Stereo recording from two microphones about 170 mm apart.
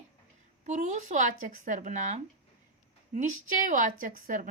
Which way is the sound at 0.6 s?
45° right (ahead or behind).